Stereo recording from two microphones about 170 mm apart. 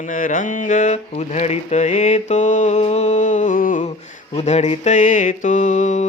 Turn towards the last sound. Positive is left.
turn(degrees=45)  # may be behind; listen again after turning